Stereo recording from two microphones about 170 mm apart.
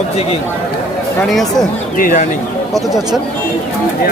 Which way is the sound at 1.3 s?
Centre (ahead or behind).